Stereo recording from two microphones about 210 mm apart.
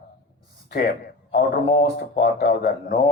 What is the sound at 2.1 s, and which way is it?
A man's voice, 50° left (ahead or behind).